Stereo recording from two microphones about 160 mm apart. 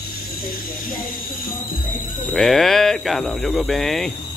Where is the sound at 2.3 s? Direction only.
Centre (ahead or behind).